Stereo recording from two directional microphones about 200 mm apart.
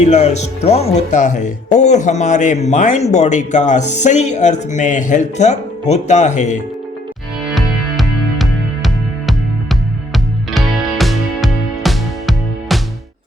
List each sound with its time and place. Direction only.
0.0 s speech: 35° left (ahead or behind)
7.5 s music: centre (ahead or behind)